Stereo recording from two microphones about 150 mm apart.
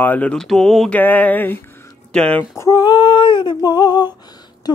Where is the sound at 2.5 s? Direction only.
25° left (ahead or behind).